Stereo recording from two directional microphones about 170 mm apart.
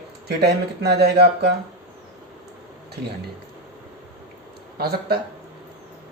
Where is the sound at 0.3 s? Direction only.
75° right (ahead or behind).